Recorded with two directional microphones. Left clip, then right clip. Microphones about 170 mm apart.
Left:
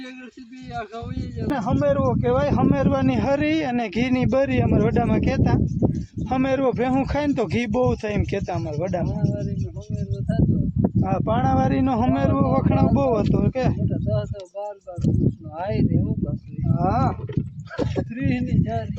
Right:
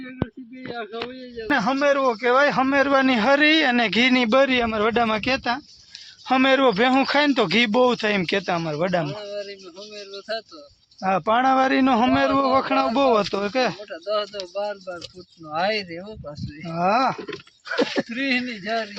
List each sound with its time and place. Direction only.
1.5 s speech: 10° right (ahead or behind)
11.0 s speech: 20° right (ahead or behind)
14.5 s speech: 20° left (ahead or behind)
16.7 s speech: 35° right (ahead or behind)
17.7 s a sound: 25° right (ahead or behind)
18.1 s speech: 10° left (ahead or behind)